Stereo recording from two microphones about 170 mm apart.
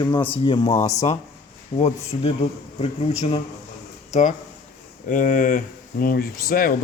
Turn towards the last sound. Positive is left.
turn(degrees=55)  # may be behind; listen again after turning